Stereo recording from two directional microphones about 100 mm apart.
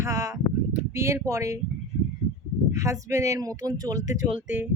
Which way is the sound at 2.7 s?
30° right (ahead or behind).